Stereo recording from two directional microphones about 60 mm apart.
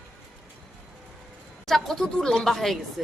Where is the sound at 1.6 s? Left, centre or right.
Centre.